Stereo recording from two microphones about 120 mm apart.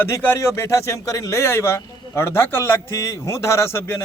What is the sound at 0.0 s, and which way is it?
Speech, 20° left (ahead or behind).